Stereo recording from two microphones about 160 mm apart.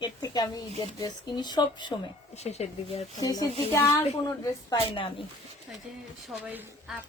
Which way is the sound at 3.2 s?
25° left (ahead or behind).